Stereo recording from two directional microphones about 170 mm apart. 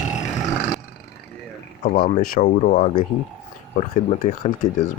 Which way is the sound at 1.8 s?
45° left (ahead or behind).